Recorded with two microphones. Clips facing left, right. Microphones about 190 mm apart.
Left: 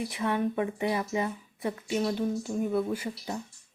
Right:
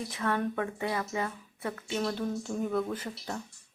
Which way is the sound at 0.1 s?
15° left (ahead or behind).